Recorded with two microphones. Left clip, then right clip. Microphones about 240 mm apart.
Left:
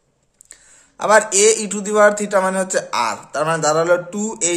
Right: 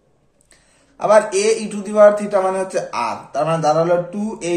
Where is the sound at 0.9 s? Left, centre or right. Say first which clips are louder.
Even; left.